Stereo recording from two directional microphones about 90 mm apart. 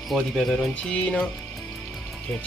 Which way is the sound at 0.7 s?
15° left (ahead or behind).